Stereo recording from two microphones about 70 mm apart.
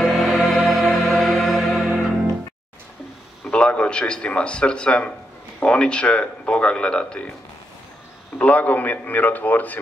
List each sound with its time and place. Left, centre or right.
0.0 s music: centre
3.4 s a man's voice: centre
8.4 s a man's voice: left